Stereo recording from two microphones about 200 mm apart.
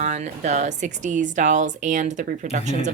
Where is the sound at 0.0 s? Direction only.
35° right (ahead or behind).